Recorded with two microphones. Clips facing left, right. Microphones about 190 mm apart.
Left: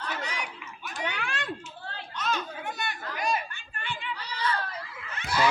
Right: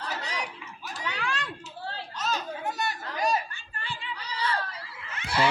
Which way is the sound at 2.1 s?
40° right (ahead or behind).